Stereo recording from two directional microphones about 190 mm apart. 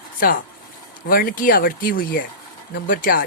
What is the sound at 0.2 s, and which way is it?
Speech, 50° left (ahead or behind).